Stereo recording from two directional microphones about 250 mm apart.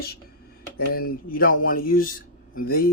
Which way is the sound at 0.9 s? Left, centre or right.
Left.